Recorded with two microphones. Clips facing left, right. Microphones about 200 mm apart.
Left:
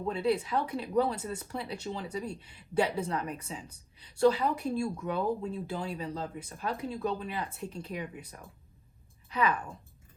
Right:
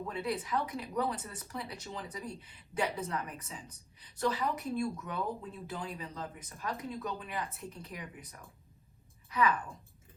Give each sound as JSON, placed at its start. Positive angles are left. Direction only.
{"t": 0.1, "sound": "a woman's voice", "side_deg": 30}